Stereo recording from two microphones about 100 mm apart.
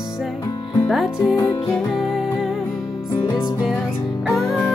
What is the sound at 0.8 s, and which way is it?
Music, centre (ahead or behind).